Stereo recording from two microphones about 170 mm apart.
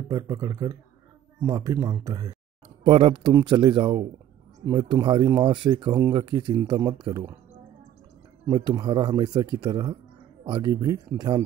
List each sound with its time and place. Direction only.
0.1 s speech: 20° right (ahead or behind)
2.8 s speech: 30° right (ahead or behind)
8.5 s speech: 25° right (ahead or behind)